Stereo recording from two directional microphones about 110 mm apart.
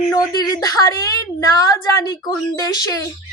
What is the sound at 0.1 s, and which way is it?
Speech, 35° left (ahead or behind).